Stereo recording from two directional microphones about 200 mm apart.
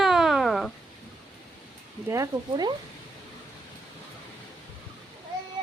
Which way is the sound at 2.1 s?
15° right (ahead or behind).